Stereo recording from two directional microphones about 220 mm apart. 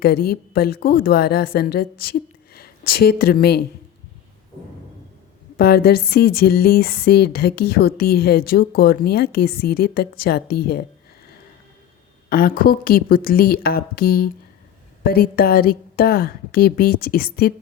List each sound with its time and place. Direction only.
0.0 s speech: 45° left (ahead or behind)
5.5 s speech: 45° left (ahead or behind)
12.3 s speech: 40° left (ahead or behind)